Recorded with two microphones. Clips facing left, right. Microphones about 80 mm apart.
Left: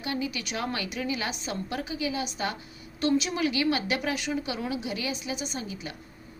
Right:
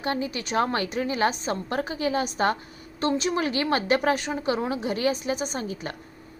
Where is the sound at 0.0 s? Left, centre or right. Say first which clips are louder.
Right 4 dB; right.